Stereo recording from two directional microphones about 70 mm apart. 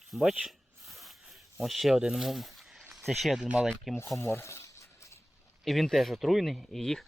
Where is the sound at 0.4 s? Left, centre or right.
Centre.